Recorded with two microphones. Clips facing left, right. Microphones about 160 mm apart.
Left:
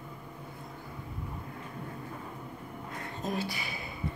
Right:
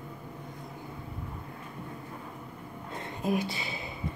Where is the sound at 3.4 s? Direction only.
25° right (ahead or behind).